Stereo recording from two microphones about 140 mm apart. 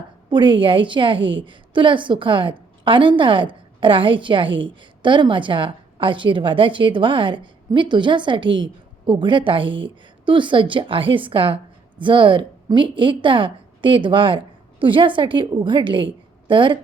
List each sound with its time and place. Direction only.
0.3 s a woman's voice: 35° right (ahead or behind)